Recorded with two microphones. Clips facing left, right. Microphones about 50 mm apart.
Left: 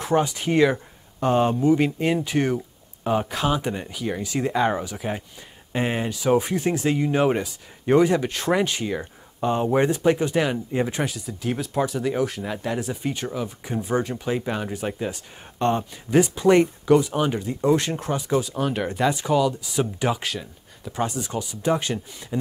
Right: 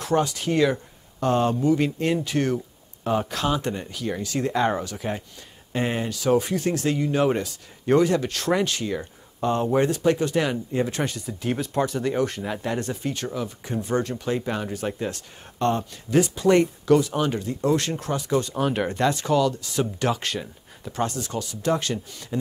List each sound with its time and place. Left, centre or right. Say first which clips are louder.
0.0 s speech: left 1 dB; centre
11.1 s speech: even; centre
13.0 s speech: left 1 dB; centre
18.4 s speech: right 1 dB; centre
19.0 s speech: left 1 dB; centre